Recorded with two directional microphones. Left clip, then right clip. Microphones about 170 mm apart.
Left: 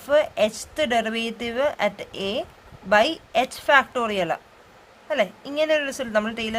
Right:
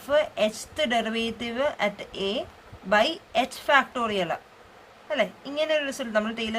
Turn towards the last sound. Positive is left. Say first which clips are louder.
# left 3 dB
turn(degrees=50)  # may be behind; listen again after turning